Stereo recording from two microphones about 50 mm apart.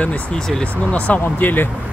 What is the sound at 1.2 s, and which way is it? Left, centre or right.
Speech, left.